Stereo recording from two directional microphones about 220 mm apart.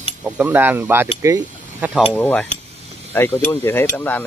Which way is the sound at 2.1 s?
5° left (ahead or behind).